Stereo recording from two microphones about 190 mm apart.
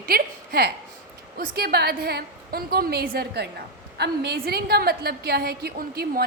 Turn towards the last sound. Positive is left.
turn(degrees=-55)  # may be behind; listen again after turning